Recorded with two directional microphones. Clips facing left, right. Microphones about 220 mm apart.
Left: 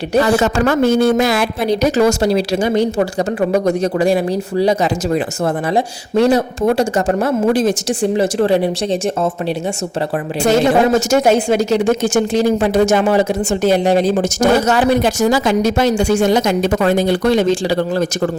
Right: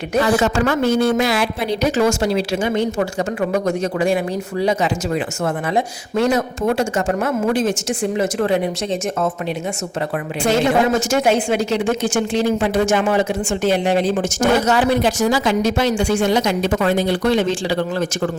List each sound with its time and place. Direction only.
0.1 s speech: 40° left (ahead or behind)
6.2 s speech: 35° left (ahead or behind)
10.4 s speech: 40° left (ahead or behind)